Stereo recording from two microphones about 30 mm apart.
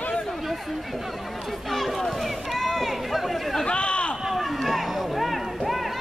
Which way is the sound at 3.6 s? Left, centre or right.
Left.